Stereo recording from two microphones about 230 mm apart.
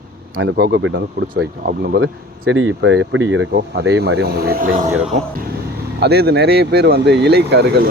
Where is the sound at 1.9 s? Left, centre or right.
Right.